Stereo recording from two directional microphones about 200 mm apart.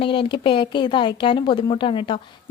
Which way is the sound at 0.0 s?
25° left (ahead or behind).